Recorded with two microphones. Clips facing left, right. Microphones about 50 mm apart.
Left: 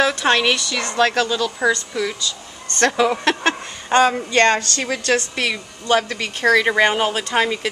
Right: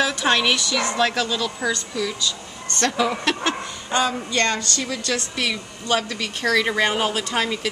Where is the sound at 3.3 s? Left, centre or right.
Left.